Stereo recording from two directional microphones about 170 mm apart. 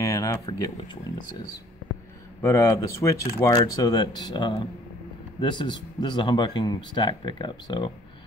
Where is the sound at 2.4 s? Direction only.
20° left (ahead or behind).